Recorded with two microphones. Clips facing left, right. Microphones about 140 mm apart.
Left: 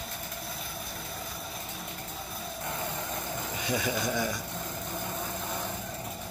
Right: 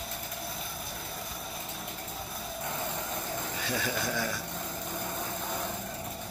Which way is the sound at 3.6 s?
15° left (ahead or behind).